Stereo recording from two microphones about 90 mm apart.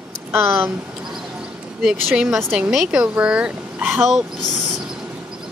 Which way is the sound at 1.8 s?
5° right (ahead or behind).